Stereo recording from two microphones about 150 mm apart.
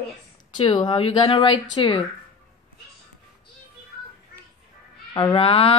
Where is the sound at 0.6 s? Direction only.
35° left (ahead or behind).